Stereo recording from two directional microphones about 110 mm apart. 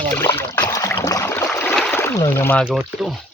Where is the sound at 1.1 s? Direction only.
25° left (ahead or behind).